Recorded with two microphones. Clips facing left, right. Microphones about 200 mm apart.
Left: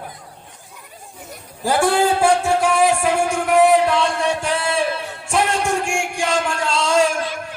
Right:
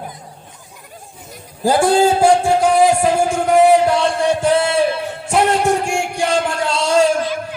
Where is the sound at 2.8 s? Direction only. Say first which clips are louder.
Right 4 dB; 25° right (ahead or behind).